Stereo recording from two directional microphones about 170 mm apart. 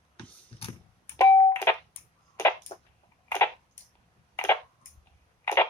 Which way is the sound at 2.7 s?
40° left (ahead or behind).